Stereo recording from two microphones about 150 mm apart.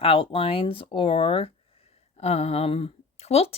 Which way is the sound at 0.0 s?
40° left (ahead or behind).